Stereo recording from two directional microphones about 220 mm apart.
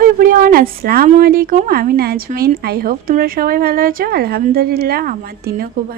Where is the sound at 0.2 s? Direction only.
40° right (ahead or behind).